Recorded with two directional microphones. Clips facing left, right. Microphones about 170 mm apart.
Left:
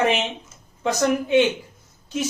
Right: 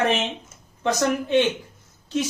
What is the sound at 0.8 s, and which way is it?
Speech, 10° left (ahead or behind).